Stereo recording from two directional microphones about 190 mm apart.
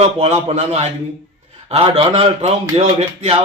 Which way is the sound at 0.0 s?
30° right (ahead or behind).